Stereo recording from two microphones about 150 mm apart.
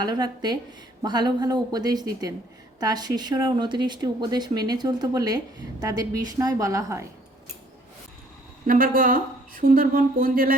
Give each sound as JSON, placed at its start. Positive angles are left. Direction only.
{"t": 0.0, "sound": "speech", "side_deg": -30}
{"t": 8.6, "sound": "a woman's voice", "side_deg": -70}